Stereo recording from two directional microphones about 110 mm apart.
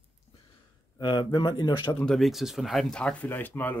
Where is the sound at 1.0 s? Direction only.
45° left (ahead or behind).